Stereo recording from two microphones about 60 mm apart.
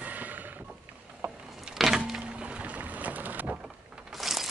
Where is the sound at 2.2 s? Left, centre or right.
Centre.